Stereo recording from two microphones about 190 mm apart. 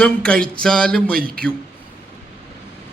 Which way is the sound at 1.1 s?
50° right (ahead or behind).